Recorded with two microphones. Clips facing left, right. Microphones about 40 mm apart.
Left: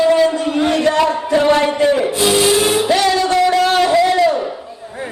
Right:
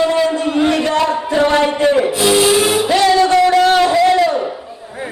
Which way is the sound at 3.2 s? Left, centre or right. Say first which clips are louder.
Right 3 dB; centre.